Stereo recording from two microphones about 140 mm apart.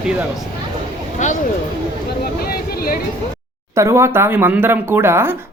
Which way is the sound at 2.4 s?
90° left.